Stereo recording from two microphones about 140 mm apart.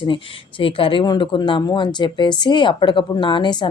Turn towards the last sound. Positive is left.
turn(degrees=35)  # may be behind; listen again after turning